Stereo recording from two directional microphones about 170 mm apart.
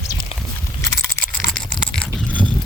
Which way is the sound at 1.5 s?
5° left (ahead or behind).